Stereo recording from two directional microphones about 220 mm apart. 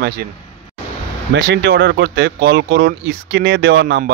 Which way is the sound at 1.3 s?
45° right (ahead or behind).